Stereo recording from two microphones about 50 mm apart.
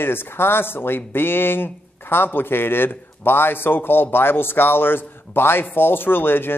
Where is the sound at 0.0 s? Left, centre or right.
Left.